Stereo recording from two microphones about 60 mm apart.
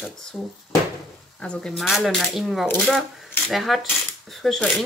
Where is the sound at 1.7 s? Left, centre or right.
Centre.